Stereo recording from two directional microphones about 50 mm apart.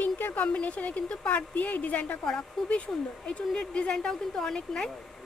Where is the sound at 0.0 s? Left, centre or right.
Left.